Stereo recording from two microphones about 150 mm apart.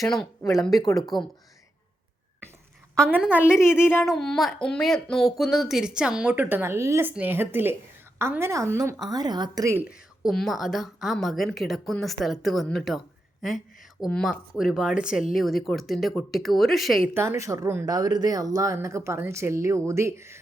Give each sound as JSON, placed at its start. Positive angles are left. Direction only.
{"t": 0.4, "sound": "a woman's voice", "side_deg": 10}
{"t": 0.9, "sound": "speech", "side_deg": 0}
{"t": 3.1, "sound": "a woman's voice", "side_deg": -10}
{"t": 3.6, "sound": "a woman's voice", "side_deg": 15}
{"t": 4.0, "sound": "a woman's voice", "side_deg": 0}
{"t": 9.7, "sound": "speech", "side_deg": -5}
{"t": 14.0, "sound": "speech", "side_deg": 5}
{"t": 17.2, "sound": "speech", "side_deg": -20}